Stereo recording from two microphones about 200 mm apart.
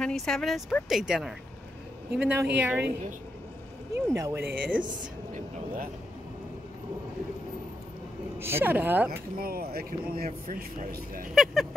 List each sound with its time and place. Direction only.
0.0 s a woman's voice: centre (ahead or behind)
3.9 s speech: 15° right (ahead or behind)
8.4 s speech: 10° right (ahead or behind)
9.4 s speech: 50° right (ahead or behind)
11.3 s a woman's voice: centre (ahead or behind)